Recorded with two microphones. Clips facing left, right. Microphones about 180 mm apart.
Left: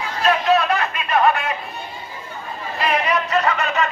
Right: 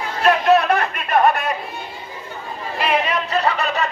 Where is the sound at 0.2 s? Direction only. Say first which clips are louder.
Right 3 dB; 50° right (ahead or behind).